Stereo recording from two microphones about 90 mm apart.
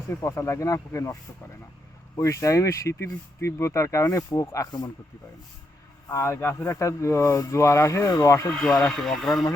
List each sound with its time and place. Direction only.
0.2 s speech: 30° left (ahead or behind)
2.1 s speech: 35° left (ahead or behind)
6.1 s speech: 30° left (ahead or behind)
8.5 s speech: 5° left (ahead or behind)